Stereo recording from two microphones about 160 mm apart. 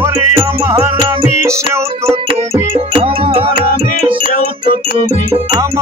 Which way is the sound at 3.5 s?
60° left (ahead or behind).